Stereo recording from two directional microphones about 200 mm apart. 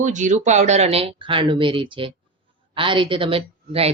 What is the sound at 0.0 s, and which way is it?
A woman's voice, 40° right (ahead or behind).